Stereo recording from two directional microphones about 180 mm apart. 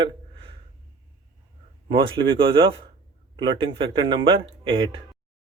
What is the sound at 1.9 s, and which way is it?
Speech, 30° right (ahead or behind).